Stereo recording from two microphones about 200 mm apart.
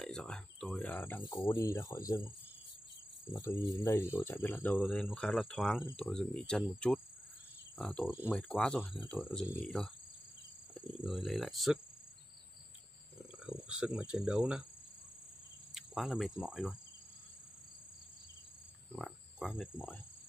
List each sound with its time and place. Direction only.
0.0 s speech: 5° left (ahead or behind)
3.3 s speech: 15° left (ahead or behind)
11.1 s speech: centre (ahead or behind)
13.7 s speech: 5° right (ahead or behind)
15.7 s cricket: centre (ahead or behind)
18.9 s pig: centre (ahead or behind)